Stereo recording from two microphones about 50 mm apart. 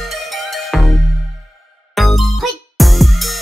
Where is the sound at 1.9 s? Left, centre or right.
Centre.